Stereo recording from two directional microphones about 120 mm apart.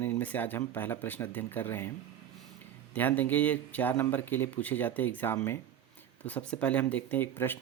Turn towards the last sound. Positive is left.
turn(degrees=15)  # may be behind; listen again after turning